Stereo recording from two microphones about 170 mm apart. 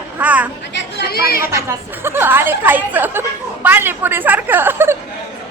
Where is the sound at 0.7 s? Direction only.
80° left.